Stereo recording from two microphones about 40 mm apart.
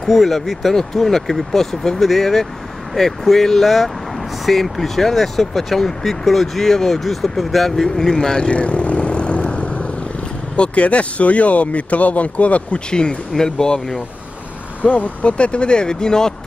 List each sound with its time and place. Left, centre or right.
0.0 s speech: centre; by 12.8 s left
13.3 s speech: centre
14.8 s speech: left; by 16.3 s centre